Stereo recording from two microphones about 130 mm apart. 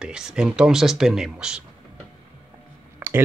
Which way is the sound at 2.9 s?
15° right (ahead or behind).